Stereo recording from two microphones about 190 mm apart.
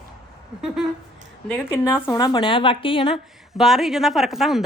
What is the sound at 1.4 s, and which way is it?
Speech, 10° left (ahead or behind).